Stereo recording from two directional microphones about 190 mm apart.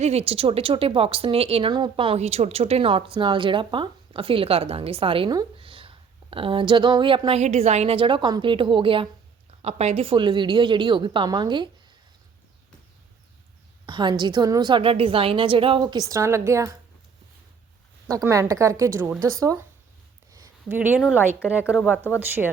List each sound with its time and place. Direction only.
0.0 s speech: 35° right (ahead or behind)
13.8 s speech: 25° right (ahead or behind)
18.1 s a woman's voice: 15° right (ahead or behind)
20.3 s a woman's voice: 15° right (ahead or behind)
21.3 s speech: 10° left (ahead or behind)